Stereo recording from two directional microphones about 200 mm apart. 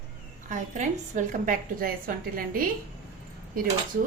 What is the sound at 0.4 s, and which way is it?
A woman's voice, 40° right (ahead or behind).